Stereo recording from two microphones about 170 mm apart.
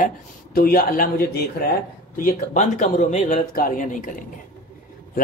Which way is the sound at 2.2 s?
45° left (ahead or behind).